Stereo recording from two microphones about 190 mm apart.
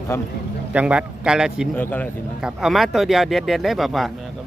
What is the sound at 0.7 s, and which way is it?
Speech, 5° right (ahead or behind).